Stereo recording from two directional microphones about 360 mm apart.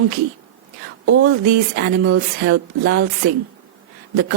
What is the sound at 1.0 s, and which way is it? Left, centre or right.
Speech, right.